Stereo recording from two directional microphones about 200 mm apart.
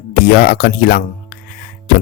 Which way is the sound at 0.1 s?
50° left (ahead or behind).